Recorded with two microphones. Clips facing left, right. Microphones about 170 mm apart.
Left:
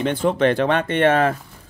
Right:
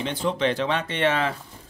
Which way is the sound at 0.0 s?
55° left (ahead or behind).